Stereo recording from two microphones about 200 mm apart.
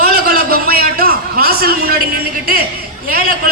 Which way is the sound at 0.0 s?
50° right (ahead or behind).